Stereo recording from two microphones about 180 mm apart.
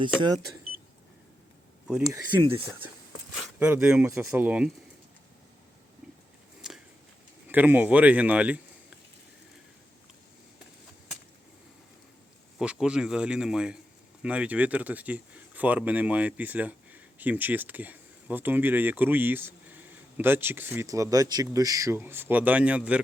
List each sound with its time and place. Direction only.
2.4 s speech: 20° right (ahead or behind)
6.6 s a sound: 5° right (ahead or behind)
7.5 s speech: 10° right (ahead or behind)
12.5 s a man's voice: 5° right (ahead or behind)